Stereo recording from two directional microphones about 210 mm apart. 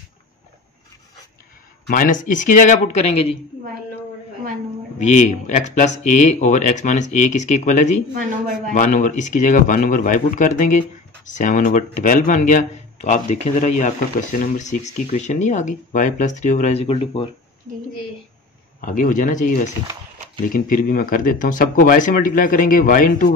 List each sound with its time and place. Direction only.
1.9 s speech: 40° left (ahead or behind)
4.9 s speech: 35° left (ahead or behind)
17.7 s speech: 40° right (ahead or behind)
18.8 s speech: 40° left (ahead or behind)